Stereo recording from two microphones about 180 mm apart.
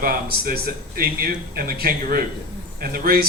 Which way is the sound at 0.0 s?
55° right (ahead or behind).